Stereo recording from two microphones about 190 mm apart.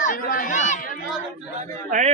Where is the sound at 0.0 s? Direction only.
45° left (ahead or behind).